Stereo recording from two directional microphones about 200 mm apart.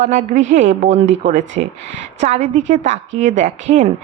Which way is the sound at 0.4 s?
65° right (ahead or behind).